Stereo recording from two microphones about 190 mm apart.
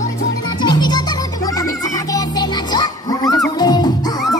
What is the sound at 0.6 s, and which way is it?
Music, 20° left (ahead or behind).